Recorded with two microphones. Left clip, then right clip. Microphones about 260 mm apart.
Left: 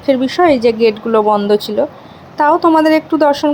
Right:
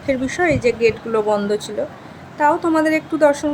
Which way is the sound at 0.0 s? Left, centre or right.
Centre.